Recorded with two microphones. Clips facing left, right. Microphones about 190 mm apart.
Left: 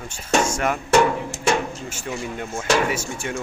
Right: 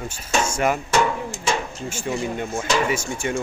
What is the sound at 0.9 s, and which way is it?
Percussion, 65° left (ahead or behind).